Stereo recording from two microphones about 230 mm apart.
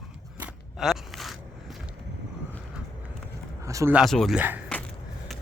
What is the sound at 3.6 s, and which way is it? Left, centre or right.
Speech, centre.